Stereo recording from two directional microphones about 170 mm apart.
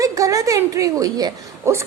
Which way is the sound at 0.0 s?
20° right (ahead or behind).